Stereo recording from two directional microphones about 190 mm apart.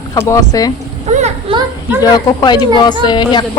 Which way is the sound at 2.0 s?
20° left (ahead or behind).